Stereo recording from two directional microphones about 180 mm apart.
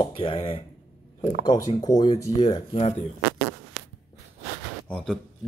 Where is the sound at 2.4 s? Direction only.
35° left (ahead or behind).